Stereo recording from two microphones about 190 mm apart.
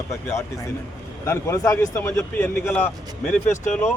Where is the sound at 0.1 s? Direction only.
15° left (ahead or behind).